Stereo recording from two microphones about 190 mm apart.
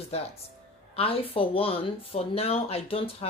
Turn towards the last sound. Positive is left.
turn(degrees=30)  # may be behind; listen again after turning